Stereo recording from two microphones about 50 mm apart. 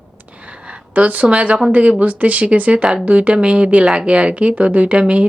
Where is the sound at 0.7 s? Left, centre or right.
Right.